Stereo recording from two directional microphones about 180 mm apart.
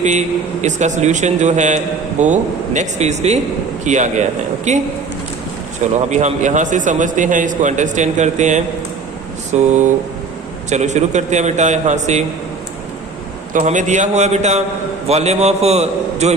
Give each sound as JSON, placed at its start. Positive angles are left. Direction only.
{"t": 0.0, "sound": "a man's voice", "side_deg": -40}
{"t": 6.1, "sound": "a man's voice", "side_deg": -40}
{"t": 13.5, "sound": "a man's voice", "side_deg": -45}